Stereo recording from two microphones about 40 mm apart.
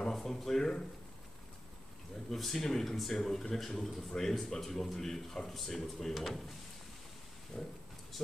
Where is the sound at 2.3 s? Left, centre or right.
Centre.